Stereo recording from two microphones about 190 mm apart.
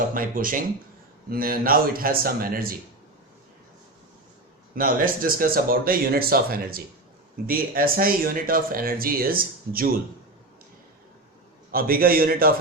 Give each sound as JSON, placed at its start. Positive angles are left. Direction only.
{"t": 0.1, "sound": "speech", "side_deg": -45}
{"t": 4.7, "sound": "speech", "side_deg": -50}
{"t": 11.7, "sound": "speech", "side_deg": -50}